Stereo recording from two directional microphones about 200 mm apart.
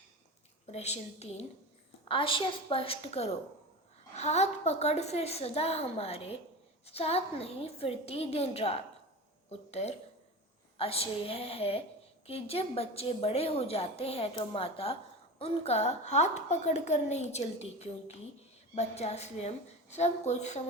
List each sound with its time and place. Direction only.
0.7 s a woman's voice: 35° left (ahead or behind)